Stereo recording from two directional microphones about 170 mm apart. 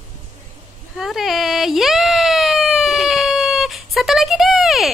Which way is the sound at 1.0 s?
Centre (ahead or behind).